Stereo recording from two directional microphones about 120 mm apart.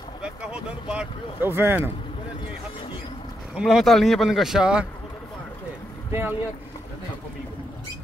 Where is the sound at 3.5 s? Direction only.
Centre (ahead or behind).